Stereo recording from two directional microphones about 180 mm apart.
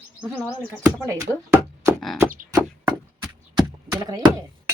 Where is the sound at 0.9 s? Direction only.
15° right (ahead or behind).